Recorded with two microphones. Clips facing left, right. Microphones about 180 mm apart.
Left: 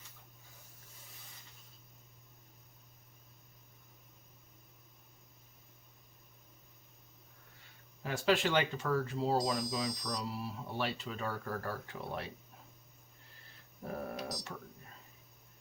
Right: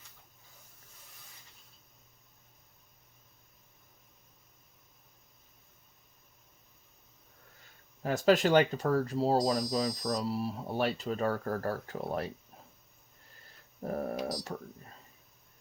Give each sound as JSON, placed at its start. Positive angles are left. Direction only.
{"t": 8.0, "sound": "speech", "side_deg": -40}
{"t": 13.8, "sound": "speech", "side_deg": -45}